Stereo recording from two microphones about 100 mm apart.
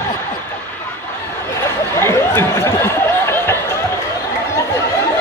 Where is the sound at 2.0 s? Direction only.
25° left (ahead or behind).